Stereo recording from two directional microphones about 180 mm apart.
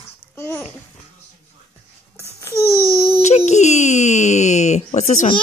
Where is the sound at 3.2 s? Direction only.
40° left (ahead or behind).